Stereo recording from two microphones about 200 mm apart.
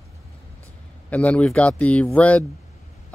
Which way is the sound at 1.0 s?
5° left (ahead or behind).